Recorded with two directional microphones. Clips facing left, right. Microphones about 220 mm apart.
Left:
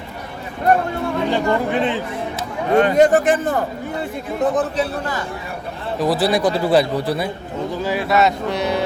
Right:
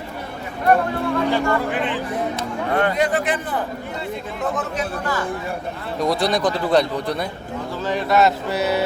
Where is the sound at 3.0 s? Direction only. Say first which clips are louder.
Left 7 dB; 45° left (ahead or behind).